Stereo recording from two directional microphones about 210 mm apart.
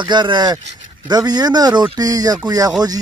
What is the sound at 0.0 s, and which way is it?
Speech, 20° right (ahead or behind).